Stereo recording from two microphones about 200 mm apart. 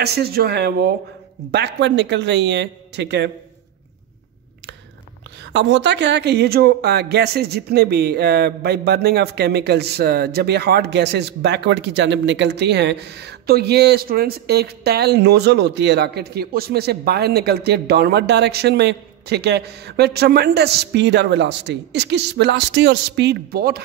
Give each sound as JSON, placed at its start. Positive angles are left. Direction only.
{"t": 0.0, "sound": "speech", "side_deg": -55}
{"t": 5.4, "sound": "speech", "side_deg": -65}